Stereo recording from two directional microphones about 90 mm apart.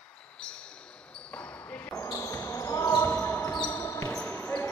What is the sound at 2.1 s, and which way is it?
Basketball bounce, 30° left (ahead or behind).